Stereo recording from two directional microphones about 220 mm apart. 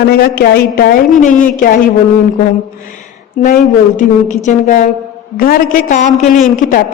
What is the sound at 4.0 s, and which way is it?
A woman's voice, 35° left (ahead or behind).